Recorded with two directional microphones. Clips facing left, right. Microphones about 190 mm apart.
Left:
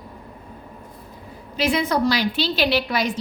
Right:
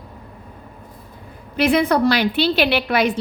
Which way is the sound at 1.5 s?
60° right (ahead or behind).